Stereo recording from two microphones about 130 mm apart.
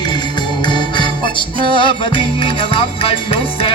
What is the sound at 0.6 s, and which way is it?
Music, 35° left (ahead or behind).